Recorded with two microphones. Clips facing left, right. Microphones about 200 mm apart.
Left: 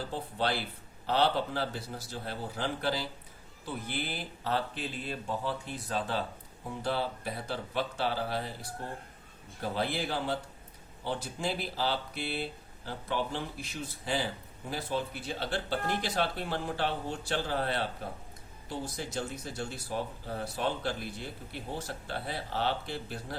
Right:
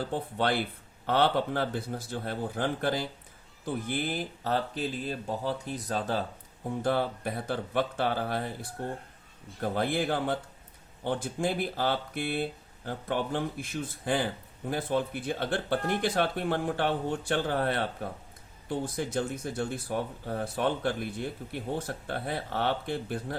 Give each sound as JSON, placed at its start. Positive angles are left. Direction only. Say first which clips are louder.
{"t": 0.1, "sound": "speech", "louder": "right 2 dB", "side_deg": -55}
{"t": 6.8, "sound": "speech", "louder": "right 4 dB", "side_deg": -50}